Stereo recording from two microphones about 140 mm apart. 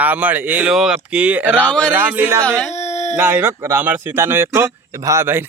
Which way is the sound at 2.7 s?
55° left (ahead or behind).